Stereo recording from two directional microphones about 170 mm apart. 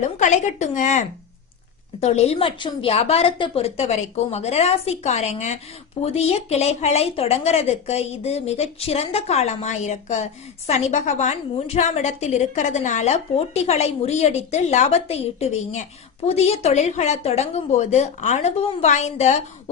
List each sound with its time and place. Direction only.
0.2 s a woman's voice: 45° left (ahead or behind)